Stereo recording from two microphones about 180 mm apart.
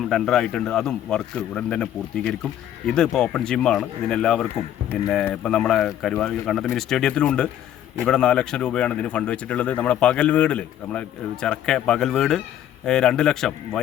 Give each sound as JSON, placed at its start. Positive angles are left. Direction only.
{"t": 0.1, "sound": "speech", "side_deg": 0}